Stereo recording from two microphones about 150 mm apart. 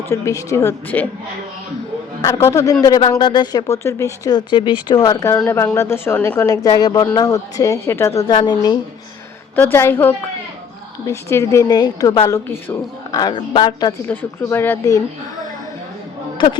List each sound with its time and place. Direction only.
0.1 s a woman's voice: 20° left (ahead or behind)
2.2 s a woman's voice: 20° left (ahead or behind)
3.2 s a woman's voice: 30° left (ahead or behind)
8.1 s a woman's voice: 30° left (ahead or behind)
9.6 s a woman's voice: 15° left (ahead or behind)
14.1 s speech: 15° left (ahead or behind)
16.4 s a woman's voice: 30° left (ahead or behind)